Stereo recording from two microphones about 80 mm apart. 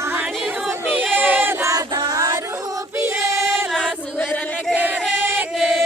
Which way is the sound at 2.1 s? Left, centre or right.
Right.